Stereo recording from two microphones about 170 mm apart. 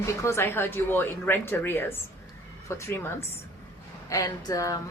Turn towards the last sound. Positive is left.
turn(degrees=20)  # may be behind; listen again after turning